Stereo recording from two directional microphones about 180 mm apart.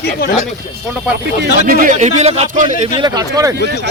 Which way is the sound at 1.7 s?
50° right (ahead or behind).